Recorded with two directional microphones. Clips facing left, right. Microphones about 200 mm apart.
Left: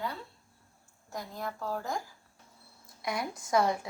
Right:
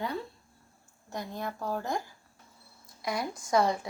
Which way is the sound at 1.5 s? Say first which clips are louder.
Right 2 dB; 20° right (ahead or behind).